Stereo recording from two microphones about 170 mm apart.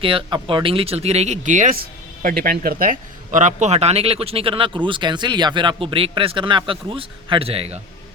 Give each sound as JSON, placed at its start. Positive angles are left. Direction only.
{"t": 0.0, "sound": "speech", "side_deg": -30}